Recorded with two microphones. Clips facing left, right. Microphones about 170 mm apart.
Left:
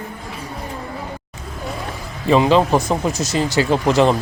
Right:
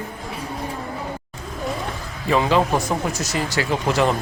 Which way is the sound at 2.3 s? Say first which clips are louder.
Left 4 dB; 25° left (ahead or behind).